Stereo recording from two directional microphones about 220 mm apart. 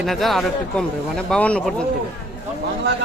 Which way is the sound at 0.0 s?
Centre (ahead or behind).